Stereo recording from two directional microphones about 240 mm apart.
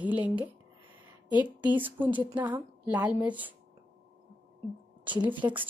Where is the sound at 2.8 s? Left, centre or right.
Centre.